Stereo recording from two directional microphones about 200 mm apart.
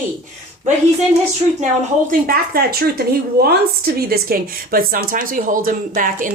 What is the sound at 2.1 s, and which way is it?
A woman's voice, 50° right (ahead or behind).